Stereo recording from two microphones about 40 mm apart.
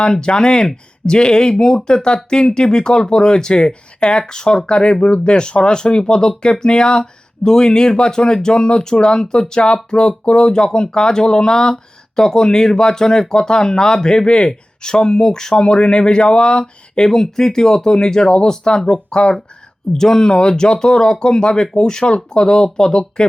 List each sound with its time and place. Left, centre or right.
0.0 s speech: left
19.9 s speech: centre